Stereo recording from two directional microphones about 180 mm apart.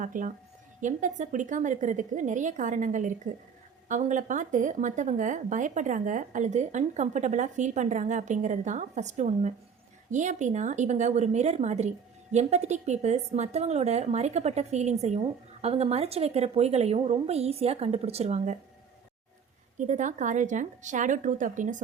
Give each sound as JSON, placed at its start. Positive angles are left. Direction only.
{"t": 0.0, "sound": "a woman's voice", "side_deg": -45}
{"t": 19.8, "sound": "speech", "side_deg": -45}